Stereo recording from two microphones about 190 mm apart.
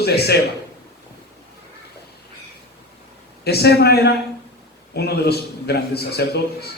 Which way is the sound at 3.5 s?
60° left (ahead or behind).